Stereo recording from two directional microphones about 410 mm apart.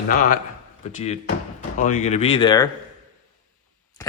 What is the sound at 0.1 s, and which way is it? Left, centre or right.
A man's voice, centre.